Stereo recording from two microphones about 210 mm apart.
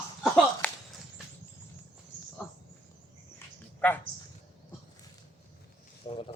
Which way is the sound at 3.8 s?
10° left (ahead or behind).